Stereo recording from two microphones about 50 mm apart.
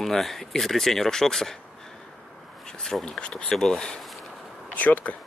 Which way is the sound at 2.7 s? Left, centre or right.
Centre.